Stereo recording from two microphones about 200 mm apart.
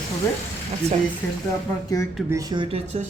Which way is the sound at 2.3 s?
20° right (ahead or behind).